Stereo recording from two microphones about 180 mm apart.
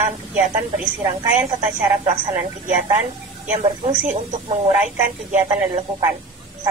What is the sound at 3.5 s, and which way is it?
A woman's voice, 35° right (ahead or behind).